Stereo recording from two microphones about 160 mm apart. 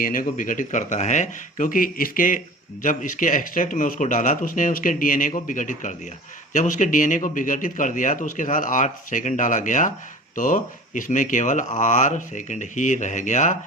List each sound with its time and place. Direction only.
0.0 s a man's voice: 60° left (ahead or behind)